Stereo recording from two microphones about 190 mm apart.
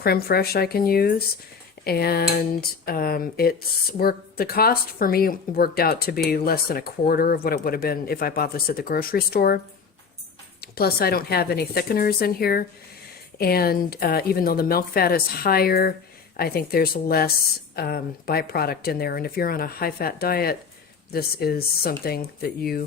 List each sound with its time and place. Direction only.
0.0 s speech: 55° left (ahead or behind)
10.6 s speech: 55° left (ahead or behind)